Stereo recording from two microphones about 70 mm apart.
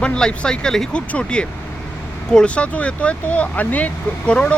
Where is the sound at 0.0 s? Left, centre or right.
Centre.